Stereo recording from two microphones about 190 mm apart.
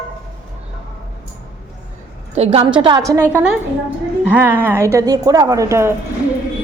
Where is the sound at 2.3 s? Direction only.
35° right (ahead or behind).